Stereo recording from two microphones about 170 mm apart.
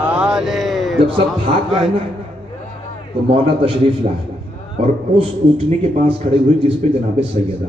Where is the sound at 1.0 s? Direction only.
35° right (ahead or behind).